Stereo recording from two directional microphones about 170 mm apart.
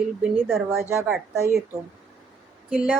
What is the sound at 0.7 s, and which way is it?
Speech, 15° right (ahead or behind).